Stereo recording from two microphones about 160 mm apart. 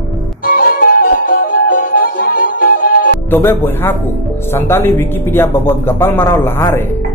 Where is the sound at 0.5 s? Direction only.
65° left (ahead or behind).